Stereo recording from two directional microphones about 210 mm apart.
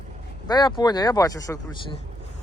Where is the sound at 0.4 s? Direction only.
20° left (ahead or behind).